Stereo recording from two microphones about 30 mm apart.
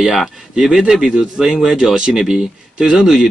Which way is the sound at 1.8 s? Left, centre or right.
Centre.